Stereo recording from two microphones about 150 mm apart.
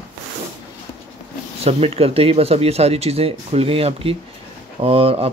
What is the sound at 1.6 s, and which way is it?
Speech, 40° right (ahead or behind).